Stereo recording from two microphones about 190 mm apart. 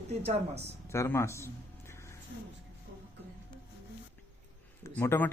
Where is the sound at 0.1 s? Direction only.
35° right (ahead or behind).